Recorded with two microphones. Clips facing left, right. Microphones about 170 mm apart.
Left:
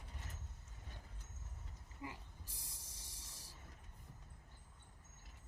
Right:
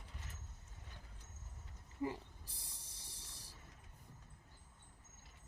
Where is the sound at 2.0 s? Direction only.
35° right (ahead or behind).